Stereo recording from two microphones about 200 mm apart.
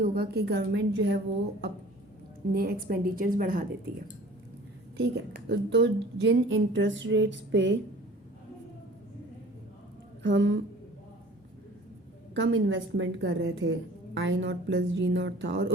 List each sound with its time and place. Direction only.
0.0 s a woman's voice: 45° right (ahead or behind)
2.5 s a woman's voice: 50° right (ahead or behind)
4.9 s a woman's voice: 55° right (ahead or behind)
10.2 s a woman's voice: 65° right (ahead or behind)
12.3 s a woman's voice: 70° right (ahead or behind)